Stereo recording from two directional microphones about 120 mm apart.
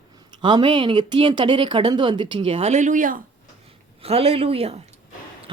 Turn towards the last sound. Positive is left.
turn(degrees=-55)  # may be behind; listen again after turning